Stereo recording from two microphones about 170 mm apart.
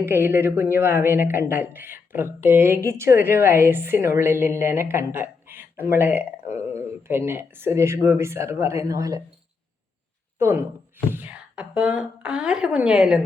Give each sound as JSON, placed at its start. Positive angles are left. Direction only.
{"t": 0.0, "sound": "a woman's voice", "side_deg": -10}
{"t": 10.3, "sound": "a woman's voice", "side_deg": -15}